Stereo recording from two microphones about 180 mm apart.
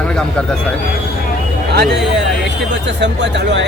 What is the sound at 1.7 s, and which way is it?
Speech, 65° right (ahead or behind).